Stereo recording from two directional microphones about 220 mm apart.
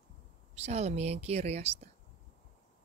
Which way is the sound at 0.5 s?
30° right (ahead or behind).